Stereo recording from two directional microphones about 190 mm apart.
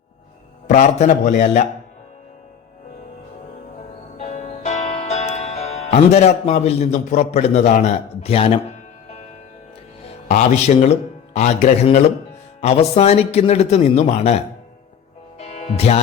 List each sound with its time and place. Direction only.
0.7 s a man's voice: 40° left (ahead or behind)
4.2 s music: 35° left (ahead or behind)
10.2 s a man's voice: 35° left (ahead or behind)
15.4 s music: 35° left (ahead or behind)